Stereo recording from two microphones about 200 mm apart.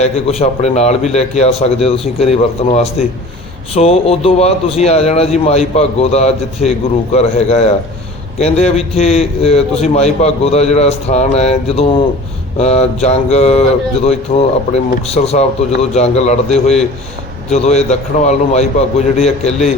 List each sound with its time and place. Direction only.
0.0 s speech: 30° left (ahead or behind)